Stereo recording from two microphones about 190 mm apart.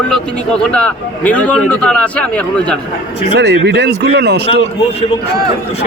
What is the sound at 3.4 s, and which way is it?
Speech, 60° right (ahead or behind).